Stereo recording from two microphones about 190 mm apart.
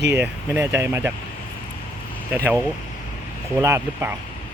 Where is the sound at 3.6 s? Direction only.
15° right (ahead or behind).